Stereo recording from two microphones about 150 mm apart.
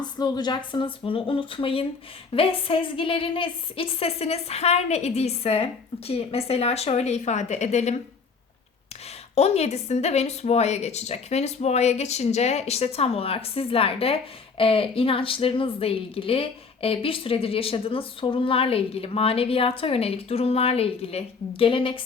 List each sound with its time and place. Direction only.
0.0 s a woman's voice: 30° left (ahead or behind); by 7.9 s 50° left (ahead or behind)
9.3 s a woman's voice: 45° left (ahead or behind)